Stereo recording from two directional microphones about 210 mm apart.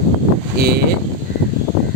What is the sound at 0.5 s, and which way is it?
Speech, 50° right (ahead or behind).